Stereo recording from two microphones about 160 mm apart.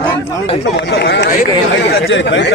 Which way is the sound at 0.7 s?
90° left.